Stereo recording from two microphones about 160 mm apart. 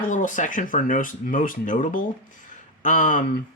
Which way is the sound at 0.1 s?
55° left (ahead or behind).